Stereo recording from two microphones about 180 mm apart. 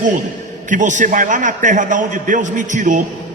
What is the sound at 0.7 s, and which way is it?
A man's voice, 45° right (ahead or behind).